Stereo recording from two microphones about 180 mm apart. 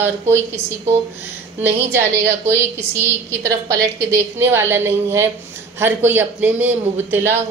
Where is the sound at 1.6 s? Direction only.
10° right (ahead or behind).